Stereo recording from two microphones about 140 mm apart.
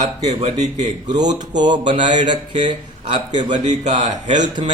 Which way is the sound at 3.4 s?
55° right (ahead or behind).